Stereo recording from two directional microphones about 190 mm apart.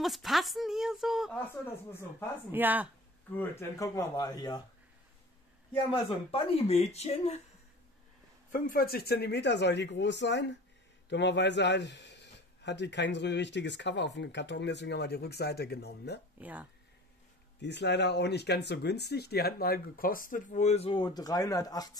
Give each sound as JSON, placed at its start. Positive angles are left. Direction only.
{"t": 0.0, "sound": "speech", "side_deg": 0}
{"t": 2.5, "sound": "speech", "side_deg": -10}
{"t": 3.3, "sound": "speech", "side_deg": 15}
{"t": 5.7, "sound": "speech", "side_deg": 25}
{"t": 8.5, "sound": "a man's voice", "side_deg": 45}
{"t": 16.3, "sound": "speech", "side_deg": -10}
{"t": 17.6, "sound": "speech", "side_deg": 65}